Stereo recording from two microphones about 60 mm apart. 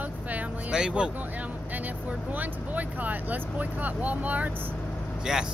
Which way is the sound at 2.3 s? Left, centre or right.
Right.